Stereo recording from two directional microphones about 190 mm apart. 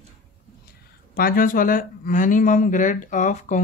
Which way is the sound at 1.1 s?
50° left (ahead or behind).